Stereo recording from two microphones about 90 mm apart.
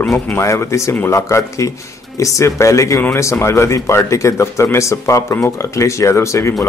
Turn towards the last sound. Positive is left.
turn(degrees=35)  # may be behind; listen again after turning